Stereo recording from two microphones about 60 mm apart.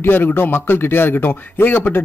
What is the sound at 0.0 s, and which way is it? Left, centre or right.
Speech, left.